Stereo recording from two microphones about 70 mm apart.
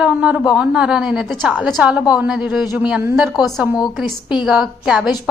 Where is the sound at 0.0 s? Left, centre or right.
Centre.